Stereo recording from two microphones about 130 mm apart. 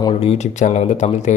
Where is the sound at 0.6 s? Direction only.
65° left (ahead or behind).